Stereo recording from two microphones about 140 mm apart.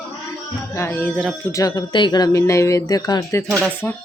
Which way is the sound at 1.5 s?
25° left (ahead or behind).